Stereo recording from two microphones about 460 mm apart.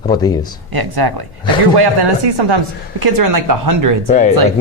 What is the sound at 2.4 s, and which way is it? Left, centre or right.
Speech, right.